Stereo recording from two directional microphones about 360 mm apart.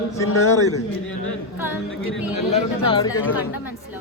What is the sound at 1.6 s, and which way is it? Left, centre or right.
Speech, centre.